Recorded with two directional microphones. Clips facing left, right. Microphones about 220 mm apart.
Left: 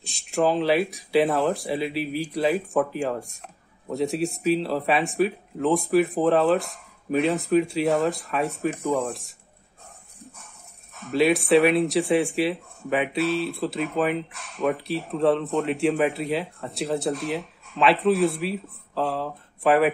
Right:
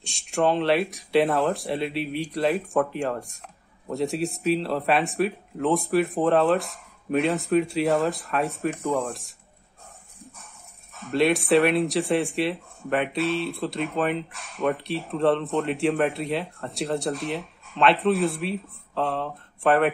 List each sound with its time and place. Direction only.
0.0 s speech: centre (ahead or behind)
11.0 s speech: centre (ahead or behind)